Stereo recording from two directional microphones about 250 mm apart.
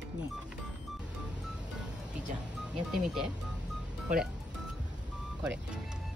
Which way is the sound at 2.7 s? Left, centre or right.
Centre.